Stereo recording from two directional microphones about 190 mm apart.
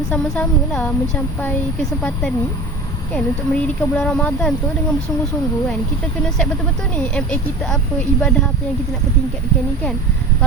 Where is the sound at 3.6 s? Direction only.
5° left (ahead or behind).